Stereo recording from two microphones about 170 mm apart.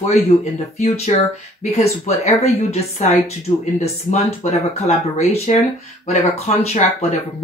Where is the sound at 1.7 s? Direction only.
40° left (ahead or behind).